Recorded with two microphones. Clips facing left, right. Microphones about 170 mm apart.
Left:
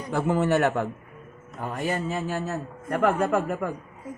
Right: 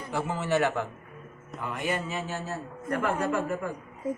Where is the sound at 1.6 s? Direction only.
40° left (ahead or behind).